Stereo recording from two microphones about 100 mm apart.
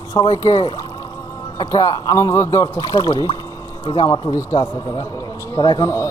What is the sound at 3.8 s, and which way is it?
Speech, 60° left (ahead or behind).